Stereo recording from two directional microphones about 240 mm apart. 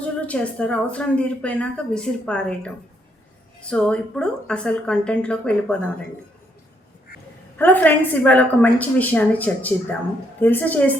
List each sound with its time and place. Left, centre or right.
0.0 s speech: centre
7.6 s a woman's voice: centre